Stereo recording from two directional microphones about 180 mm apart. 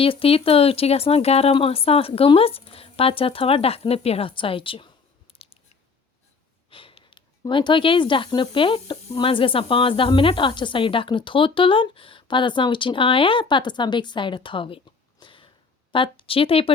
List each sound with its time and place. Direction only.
0.0 s speech: 30° left (ahead or behind)
5.3 s scissors: 30° left (ahead or behind)
6.7 s speech: 30° left (ahead or behind)
15.2 s a sound: 30° left (ahead or behind)
15.9 s speech: 30° left (ahead or behind)